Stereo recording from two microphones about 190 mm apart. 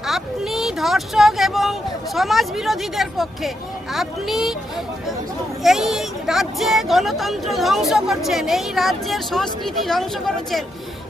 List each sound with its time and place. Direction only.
0.0 s speech: centre (ahead or behind)
5.6 s speech: centre (ahead or behind)